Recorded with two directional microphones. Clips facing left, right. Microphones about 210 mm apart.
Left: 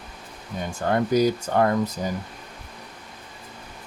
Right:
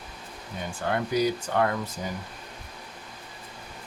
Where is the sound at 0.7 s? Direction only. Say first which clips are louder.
Left 6 dB; 45° left (ahead or behind).